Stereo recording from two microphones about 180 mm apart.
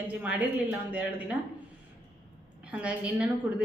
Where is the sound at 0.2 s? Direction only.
5° right (ahead or behind).